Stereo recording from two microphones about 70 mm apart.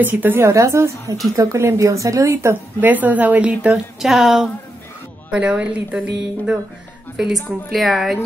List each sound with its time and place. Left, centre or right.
0.0 s a woman's voice: right
0.4 s speech: right
2.8 s a woman's voice: right
3.7 s speech: centre
5.3 s a woman's voice: centre
7.2 s a woman's voice: centre